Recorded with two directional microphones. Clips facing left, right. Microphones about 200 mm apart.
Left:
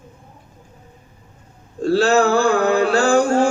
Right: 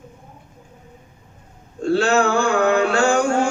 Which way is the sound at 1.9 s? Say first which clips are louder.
Left 2 dB; 35° left (ahead or behind).